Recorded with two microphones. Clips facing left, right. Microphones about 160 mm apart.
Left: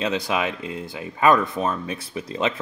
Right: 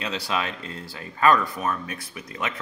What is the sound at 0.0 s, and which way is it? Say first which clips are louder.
Speech: left 5 dB; 20° left (ahead or behind).